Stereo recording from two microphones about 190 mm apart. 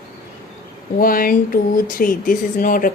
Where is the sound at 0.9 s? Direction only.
50° left (ahead or behind).